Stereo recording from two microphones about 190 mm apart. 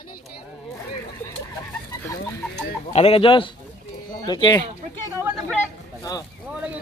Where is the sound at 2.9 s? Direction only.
35° left (ahead or behind).